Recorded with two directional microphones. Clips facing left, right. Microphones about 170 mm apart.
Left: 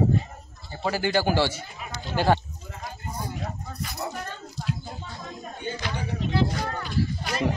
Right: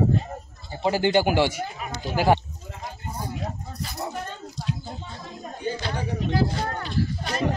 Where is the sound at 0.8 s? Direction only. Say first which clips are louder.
Right 4 dB; 20° right (ahead or behind).